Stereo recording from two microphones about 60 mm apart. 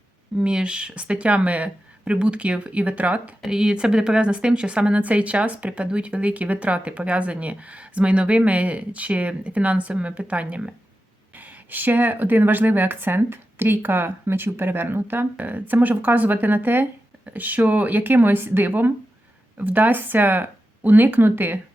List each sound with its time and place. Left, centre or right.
0.3 s a woman's voice: centre
3.4 s a woman's voice: centre; by 21.6 s right